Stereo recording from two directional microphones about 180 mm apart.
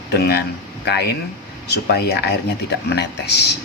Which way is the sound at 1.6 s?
65° left (ahead or behind).